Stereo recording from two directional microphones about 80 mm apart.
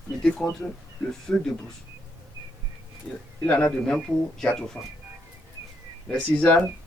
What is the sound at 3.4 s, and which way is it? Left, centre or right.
Speech, centre.